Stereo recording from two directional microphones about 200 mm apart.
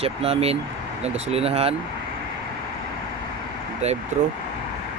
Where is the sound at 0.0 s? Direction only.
30° right (ahead or behind).